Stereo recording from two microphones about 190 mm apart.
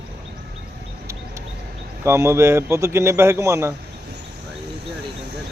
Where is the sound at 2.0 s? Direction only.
15° right (ahead or behind).